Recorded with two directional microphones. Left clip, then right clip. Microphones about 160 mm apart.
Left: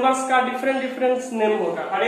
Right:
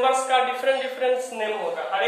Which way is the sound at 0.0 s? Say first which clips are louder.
Left 1 dB; 15° right (ahead or behind).